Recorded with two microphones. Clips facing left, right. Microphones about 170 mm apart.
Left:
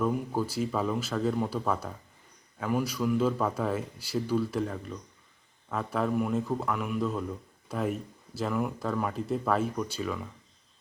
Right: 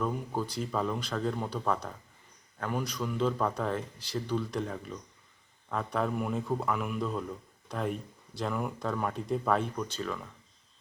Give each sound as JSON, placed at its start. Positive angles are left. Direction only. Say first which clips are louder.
{"t": 0.0, "sound": "a man's voice", "louder": "left 4 dB", "side_deg": 5}